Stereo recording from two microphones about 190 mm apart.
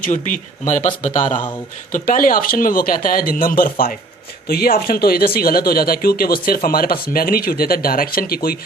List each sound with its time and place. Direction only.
0.0 s speech: 40° left (ahead or behind)